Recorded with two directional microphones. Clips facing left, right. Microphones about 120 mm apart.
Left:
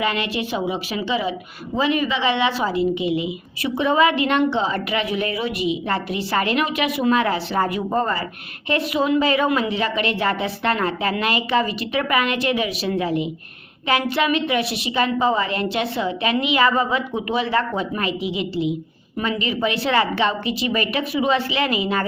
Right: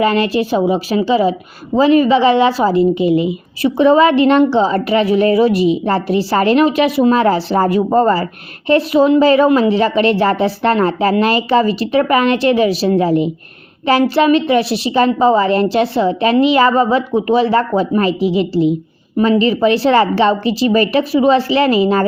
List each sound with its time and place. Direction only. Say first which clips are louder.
0.0 s a woman's voice: right 9 dB; 40° right (ahead or behind)